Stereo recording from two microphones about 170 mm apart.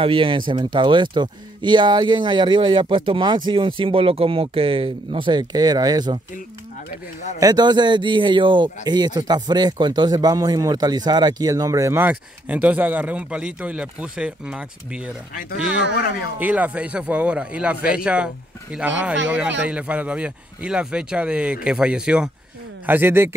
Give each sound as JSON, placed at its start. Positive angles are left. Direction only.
{"t": 0.0, "sound": "speech", "side_deg": -30}
{"t": 7.3, "sound": "speech", "side_deg": -20}
{"t": 16.3, "sound": "a man's voice", "side_deg": -10}